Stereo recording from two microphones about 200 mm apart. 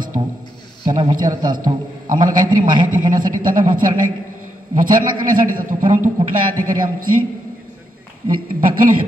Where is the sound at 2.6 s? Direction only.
40° right (ahead or behind).